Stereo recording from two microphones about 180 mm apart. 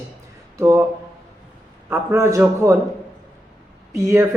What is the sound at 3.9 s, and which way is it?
Speech, 15° right (ahead or behind).